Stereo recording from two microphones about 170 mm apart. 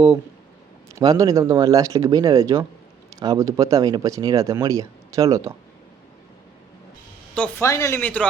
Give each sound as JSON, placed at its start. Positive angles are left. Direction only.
{"t": 0.9, "sound": "speech", "side_deg": -20}
{"t": 7.3, "sound": "speech", "side_deg": 10}